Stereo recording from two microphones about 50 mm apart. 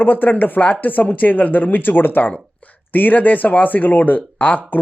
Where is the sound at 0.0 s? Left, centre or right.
Left.